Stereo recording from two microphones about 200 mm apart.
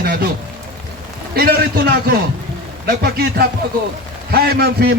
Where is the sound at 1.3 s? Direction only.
50° right (ahead or behind).